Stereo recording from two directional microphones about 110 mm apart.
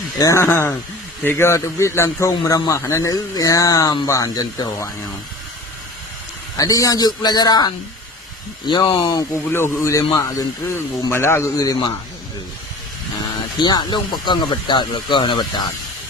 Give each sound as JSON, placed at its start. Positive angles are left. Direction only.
{"t": 0.2, "sound": "a man's voice", "side_deg": 30}
{"t": 6.6, "sound": "a man's voice", "side_deg": 30}
{"t": 9.0, "sound": "a man's voice", "side_deg": 25}
{"t": 11.5, "sound": "a man's voice", "side_deg": 35}
{"t": 13.6, "sound": "speech", "side_deg": 40}